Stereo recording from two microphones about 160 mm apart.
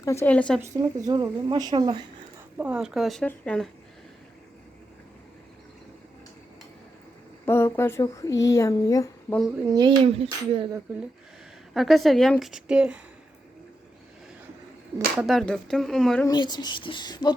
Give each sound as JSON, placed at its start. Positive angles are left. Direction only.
{"t": 0.0, "sound": "speech", "side_deg": 15}
{"t": 0.6, "sound": "speech", "side_deg": -20}
{"t": 2.6, "sound": "a woman's voice", "side_deg": -5}
{"t": 7.4, "sound": "speech", "side_deg": 15}
{"t": 9.6, "sound": "speech", "side_deg": -25}
{"t": 11.7, "sound": "a woman's voice", "side_deg": 0}
{"t": 15.2, "sound": "a woman's voice", "side_deg": 0}
{"t": 16.2, "sound": "speech", "side_deg": 25}